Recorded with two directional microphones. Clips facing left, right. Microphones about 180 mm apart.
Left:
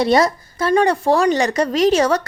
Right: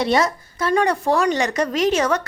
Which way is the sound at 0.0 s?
35° left (ahead or behind).